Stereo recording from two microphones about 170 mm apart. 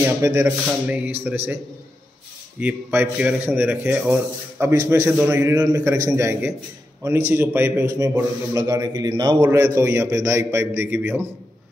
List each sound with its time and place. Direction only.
0.0 s a man's voice: 15° right (ahead or behind)
2.6 s a man's voice: 10° right (ahead or behind)